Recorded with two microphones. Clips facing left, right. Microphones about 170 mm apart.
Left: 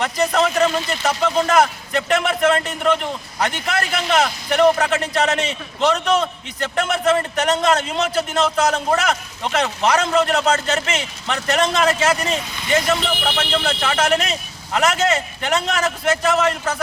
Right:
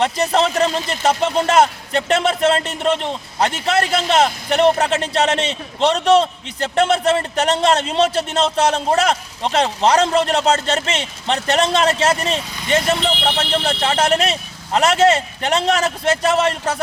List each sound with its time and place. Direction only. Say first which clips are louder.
0.0 s speech: right 2 dB; 30° right (ahead or behind)